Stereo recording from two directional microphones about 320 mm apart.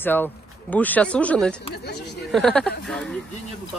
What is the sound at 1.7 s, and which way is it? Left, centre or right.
Speech, left.